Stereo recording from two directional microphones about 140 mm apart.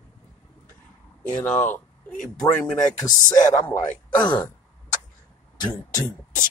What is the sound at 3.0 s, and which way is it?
Speech, 30° left (ahead or behind).